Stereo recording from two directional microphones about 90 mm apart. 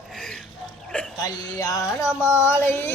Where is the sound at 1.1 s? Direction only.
45° left (ahead or behind).